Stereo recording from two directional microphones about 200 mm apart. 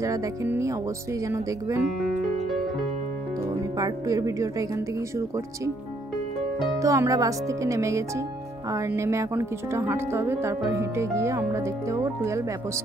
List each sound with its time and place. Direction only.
0.0 s speech: 15° right (ahead or behind)
3.7 s speech: 20° right (ahead or behind)
6.8 s speech: 15° right (ahead or behind)